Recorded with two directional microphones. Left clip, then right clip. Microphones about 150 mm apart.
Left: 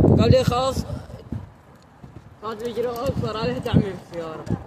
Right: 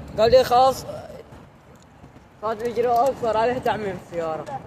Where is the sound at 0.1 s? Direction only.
30° left (ahead or behind).